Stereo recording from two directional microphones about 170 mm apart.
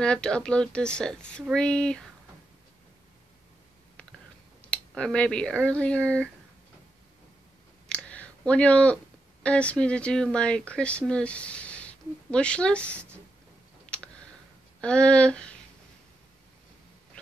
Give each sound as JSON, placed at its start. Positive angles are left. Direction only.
{"t": 0.0, "sound": "a woman's voice", "side_deg": 5}
{"t": 4.6, "sound": "a woman's voice", "side_deg": 5}
{"t": 7.9, "sound": "speech", "side_deg": 5}
{"t": 13.8, "sound": "clicking", "side_deg": 5}
{"t": 14.8, "sound": "speech", "side_deg": 5}